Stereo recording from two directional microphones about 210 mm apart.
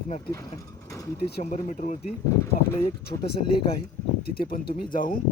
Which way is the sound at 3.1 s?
30° left (ahead or behind).